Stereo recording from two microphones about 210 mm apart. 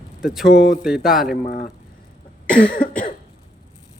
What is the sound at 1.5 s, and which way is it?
Speech, 40° left (ahead or behind).